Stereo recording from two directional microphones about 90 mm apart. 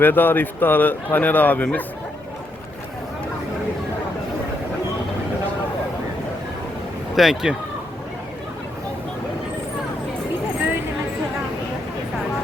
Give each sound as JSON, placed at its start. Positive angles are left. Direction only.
{"t": 0.0, "sound": "a man's voice", "side_deg": 20}
{"t": 7.2, "sound": "speech", "side_deg": 0}